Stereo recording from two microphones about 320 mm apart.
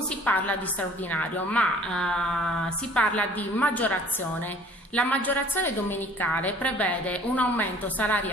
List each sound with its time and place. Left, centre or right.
0.2 s a woman's voice: centre
4.9 s a woman's voice: centre